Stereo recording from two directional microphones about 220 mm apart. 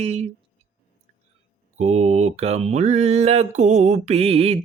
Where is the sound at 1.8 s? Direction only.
30° right (ahead or behind).